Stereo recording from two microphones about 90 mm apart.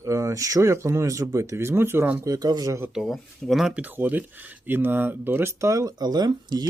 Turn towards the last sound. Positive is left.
turn(degrees=-50)  # may be behind; listen again after turning